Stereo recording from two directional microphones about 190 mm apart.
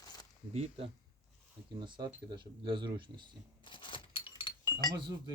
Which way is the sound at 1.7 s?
25° right (ahead or behind).